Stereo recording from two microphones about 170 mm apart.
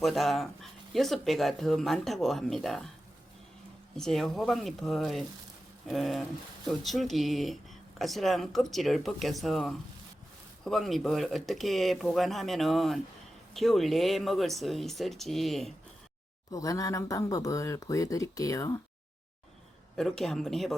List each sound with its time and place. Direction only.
0.0 s speech: centre (ahead or behind)
3.9 s speech: centre (ahead or behind)
16.5 s speech: 20° left (ahead or behind)
20.0 s speech: 5° left (ahead or behind)